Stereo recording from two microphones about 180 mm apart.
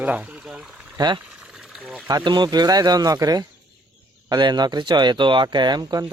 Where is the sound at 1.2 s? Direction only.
5° right (ahead or behind).